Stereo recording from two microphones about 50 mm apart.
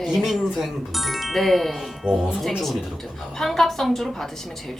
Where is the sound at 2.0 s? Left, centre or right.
Centre.